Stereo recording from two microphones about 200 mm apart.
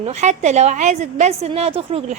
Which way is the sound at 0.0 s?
35° right (ahead or behind).